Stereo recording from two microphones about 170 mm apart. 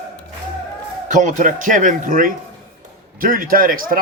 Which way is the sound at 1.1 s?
45° right (ahead or behind).